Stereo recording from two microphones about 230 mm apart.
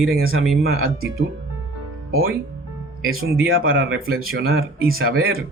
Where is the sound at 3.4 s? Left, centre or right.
Right.